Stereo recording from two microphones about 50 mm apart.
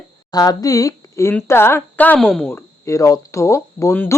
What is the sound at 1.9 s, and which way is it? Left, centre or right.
Speech, left.